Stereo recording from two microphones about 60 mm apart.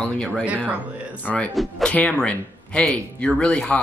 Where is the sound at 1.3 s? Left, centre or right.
Centre.